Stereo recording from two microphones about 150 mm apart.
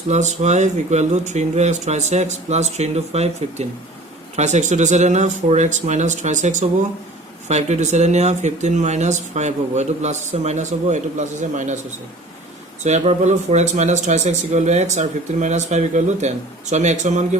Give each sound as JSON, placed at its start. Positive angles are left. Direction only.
{"t": 0.1, "sound": "speech", "side_deg": -50}
{"t": 12.8, "sound": "speech", "side_deg": -50}